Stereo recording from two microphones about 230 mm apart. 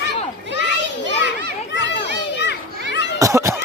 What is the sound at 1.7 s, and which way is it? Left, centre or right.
Children playing, left.